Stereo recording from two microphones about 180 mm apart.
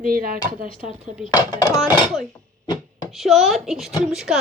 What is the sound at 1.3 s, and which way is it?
Speech, 20° left (ahead or behind).